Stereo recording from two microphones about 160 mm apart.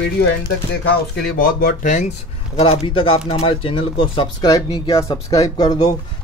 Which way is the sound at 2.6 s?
35° left (ahead or behind).